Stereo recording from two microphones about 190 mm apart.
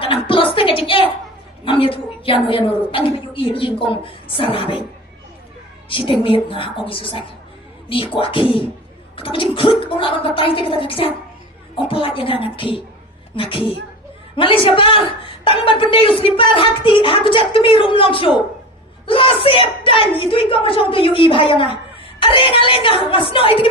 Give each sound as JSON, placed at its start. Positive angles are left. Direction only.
{"t": 0.0, "sound": "a sound", "side_deg": 30}
{"t": 1.6, "sound": "a woman's voice", "side_deg": 30}
{"t": 5.9, "sound": "a woman's voice", "side_deg": 30}